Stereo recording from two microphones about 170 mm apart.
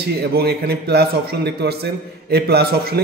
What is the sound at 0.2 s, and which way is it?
A man's voice, 70° right (ahead or behind).